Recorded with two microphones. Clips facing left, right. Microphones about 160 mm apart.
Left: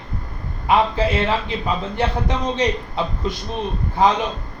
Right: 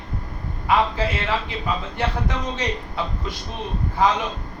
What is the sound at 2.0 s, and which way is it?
A man's voice, 20° left (ahead or behind).